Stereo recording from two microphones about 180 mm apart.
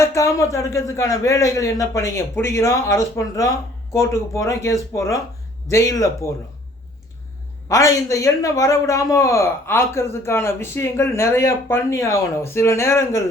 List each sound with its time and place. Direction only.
0.0 s a man's voice: 15° left (ahead or behind)
7.7 s a man's voice: 15° left (ahead or behind)